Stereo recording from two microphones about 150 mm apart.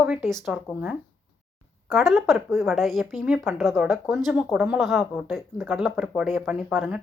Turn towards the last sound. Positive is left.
turn(degrees=-5)  # may be behind; listen again after turning